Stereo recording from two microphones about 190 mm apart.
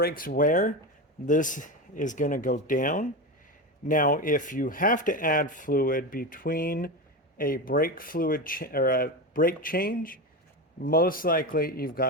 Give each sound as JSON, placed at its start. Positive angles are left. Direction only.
{"t": 0.0, "sound": "speech", "side_deg": 50}